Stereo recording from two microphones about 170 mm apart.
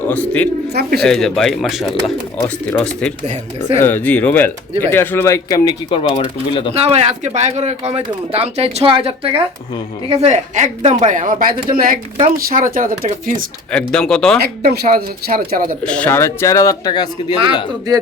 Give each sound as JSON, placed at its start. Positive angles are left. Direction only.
{"t": 0.1, "sound": "speech", "side_deg": 10}
{"t": 0.7, "sound": "speech", "side_deg": -65}
{"t": 1.0, "sound": "speech", "side_deg": 5}
{"t": 2.4, "sound": "speech", "side_deg": 15}
{"t": 6.7, "sound": "speech", "side_deg": -35}
{"t": 13.7, "sound": "speech", "side_deg": 5}
{"t": 14.4, "sound": "speech", "side_deg": -65}
{"t": 15.8, "sound": "speech", "side_deg": 5}
{"t": 17.7, "sound": "speech", "side_deg": -20}